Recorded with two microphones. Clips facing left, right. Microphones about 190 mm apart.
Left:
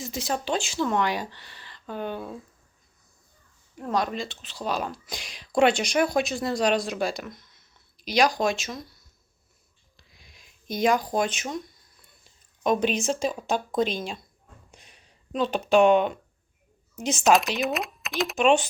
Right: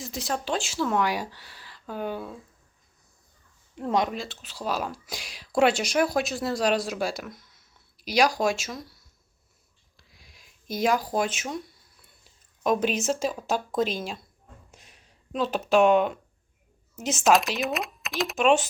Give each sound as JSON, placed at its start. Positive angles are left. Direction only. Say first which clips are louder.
{"t": 0.0, "sound": "speech", "louder": "left 1 dB", "side_deg": 0}
{"t": 3.8, "sound": "speech", "louder": "right 2 dB", "side_deg": -20}
{"t": 4.1, "sound": "speech", "louder": "left 2 dB", "side_deg": -5}
{"t": 10.0, "sound": "a sound", "louder": "even", "side_deg": -5}
{"t": 12.6, "sound": "speech", "louder": "left 1 dB", "side_deg": -5}
{"t": 14.7, "sound": "a sound", "louder": "even", "side_deg": 0}
{"t": 16.9, "sound": "speech", "louder": "left 1 dB", "side_deg": 0}